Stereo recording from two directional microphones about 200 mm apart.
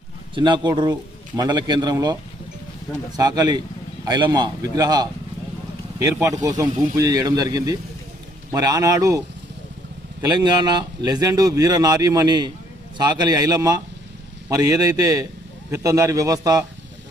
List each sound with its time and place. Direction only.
0.3 s a man's voice: 25° right (ahead or behind)
6.1 s speech: 15° right (ahead or behind)
10.2 s a man's voice: 20° right (ahead or behind)